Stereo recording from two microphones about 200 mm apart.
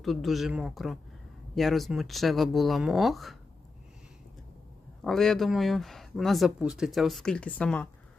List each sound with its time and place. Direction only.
0.0 s speech: centre (ahead or behind)
5.0 s speech: centre (ahead or behind)